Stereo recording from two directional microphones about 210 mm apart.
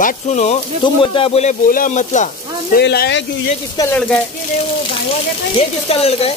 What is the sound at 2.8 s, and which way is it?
Speech, 55° left (ahead or behind).